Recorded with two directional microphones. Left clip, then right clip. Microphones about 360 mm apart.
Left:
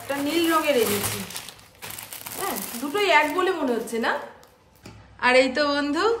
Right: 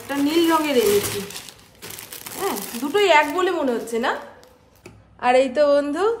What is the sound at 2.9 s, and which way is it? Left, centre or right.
A child's voice, centre.